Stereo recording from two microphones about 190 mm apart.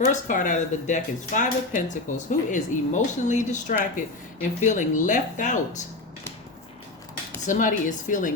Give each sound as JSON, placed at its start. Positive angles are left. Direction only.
{"t": 0.1, "sound": "speech", "side_deg": 45}
{"t": 7.4, "sound": "speech", "side_deg": 45}